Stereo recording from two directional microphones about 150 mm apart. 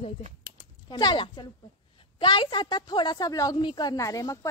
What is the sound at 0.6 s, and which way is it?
A woman's voice, 30° left (ahead or behind).